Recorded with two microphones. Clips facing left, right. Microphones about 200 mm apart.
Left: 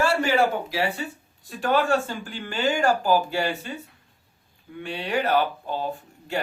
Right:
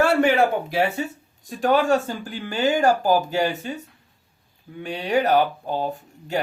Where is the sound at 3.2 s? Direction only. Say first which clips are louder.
Right 2 dB; 40° right (ahead or behind).